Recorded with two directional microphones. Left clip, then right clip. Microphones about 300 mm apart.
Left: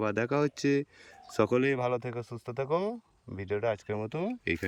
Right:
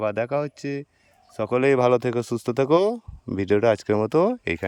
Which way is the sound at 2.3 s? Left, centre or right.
Right.